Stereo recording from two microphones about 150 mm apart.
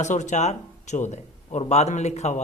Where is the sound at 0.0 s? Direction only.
55° left (ahead or behind).